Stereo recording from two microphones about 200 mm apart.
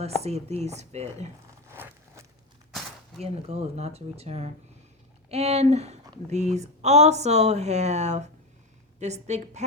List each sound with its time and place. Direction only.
0.2 s speech: 30° right (ahead or behind)
1.6 s walk: 10° right (ahead or behind)
3.2 s speech: 30° right (ahead or behind)